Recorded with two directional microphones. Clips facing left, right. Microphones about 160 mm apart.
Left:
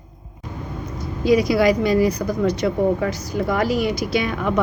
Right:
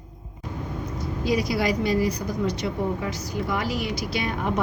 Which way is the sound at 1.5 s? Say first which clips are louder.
Left 6 dB; 65° left (ahead or behind).